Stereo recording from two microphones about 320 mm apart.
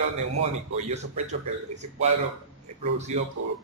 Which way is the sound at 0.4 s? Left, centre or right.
Centre.